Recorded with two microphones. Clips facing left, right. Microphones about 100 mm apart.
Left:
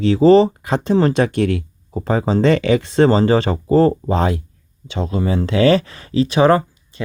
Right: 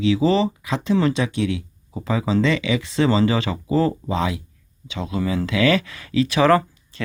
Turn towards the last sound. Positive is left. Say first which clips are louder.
# left 1 dB
turn(degrees=25)  # may be behind; listen again after turning